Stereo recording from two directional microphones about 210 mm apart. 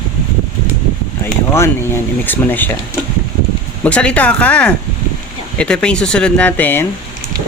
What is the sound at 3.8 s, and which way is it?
Speech, 5° left (ahead or behind).